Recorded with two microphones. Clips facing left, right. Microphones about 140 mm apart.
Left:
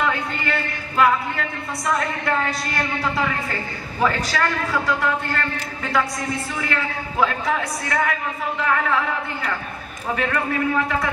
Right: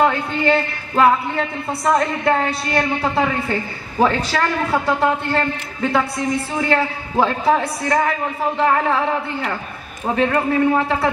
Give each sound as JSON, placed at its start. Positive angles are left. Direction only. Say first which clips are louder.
{"t": 0.0, "sound": "a man's voice", "louder": "right 7 dB", "side_deg": -35}